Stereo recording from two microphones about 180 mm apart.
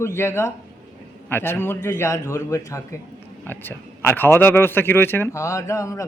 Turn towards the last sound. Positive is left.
turn(degrees=15)  # may be behind; listen again after turning